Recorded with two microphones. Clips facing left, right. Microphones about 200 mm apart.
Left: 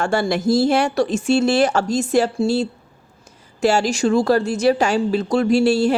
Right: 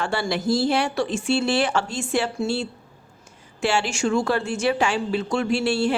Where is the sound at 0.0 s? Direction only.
45° left (ahead or behind).